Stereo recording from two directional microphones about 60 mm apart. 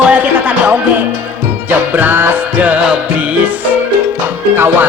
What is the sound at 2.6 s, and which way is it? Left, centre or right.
Speech, right.